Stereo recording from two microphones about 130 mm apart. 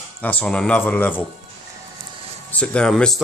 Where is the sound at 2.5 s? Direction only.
10° left (ahead or behind).